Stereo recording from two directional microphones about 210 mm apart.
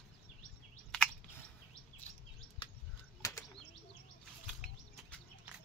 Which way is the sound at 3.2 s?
15° left (ahead or behind).